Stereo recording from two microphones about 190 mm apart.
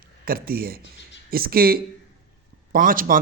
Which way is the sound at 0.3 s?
50° right (ahead or behind).